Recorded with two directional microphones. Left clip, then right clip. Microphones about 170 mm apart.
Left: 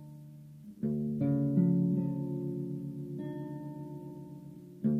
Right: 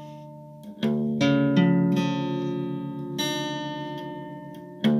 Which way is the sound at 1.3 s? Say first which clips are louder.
Right 8 dB; 20° right (ahead or behind).